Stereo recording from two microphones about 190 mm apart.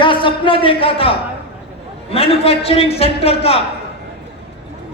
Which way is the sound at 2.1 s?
30° left (ahead or behind).